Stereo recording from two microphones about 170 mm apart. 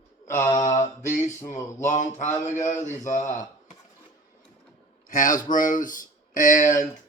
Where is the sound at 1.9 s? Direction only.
45° left (ahead or behind).